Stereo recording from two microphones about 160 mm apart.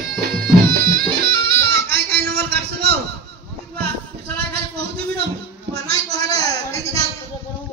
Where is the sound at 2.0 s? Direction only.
85° right.